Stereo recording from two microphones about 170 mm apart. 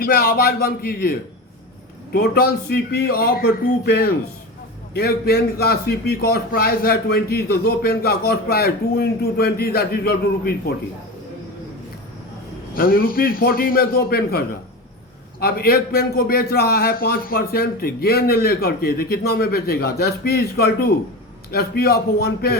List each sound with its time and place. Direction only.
0.0 s a man's voice: 60° left (ahead or behind)
2.1 s a man's voice: 60° left (ahead or behind)
12.7 s a man's voice: 60° left (ahead or behind)